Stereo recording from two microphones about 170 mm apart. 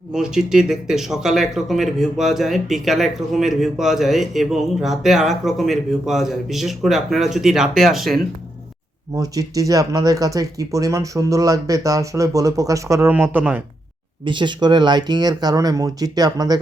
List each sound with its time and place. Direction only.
0.1 s speech: 5° right (ahead or behind)
9.1 s speech: 20° right (ahead or behind)
14.3 s speech: 25° right (ahead or behind)